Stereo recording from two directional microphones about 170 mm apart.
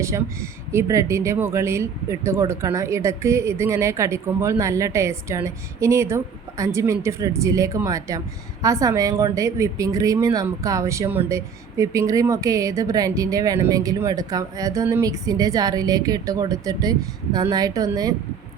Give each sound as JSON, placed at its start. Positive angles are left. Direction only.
{"t": 0.0, "sound": "a woman's voice", "side_deg": -15}